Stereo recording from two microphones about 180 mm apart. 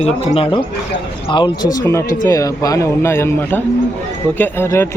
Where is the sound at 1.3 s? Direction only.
20° left (ahead or behind).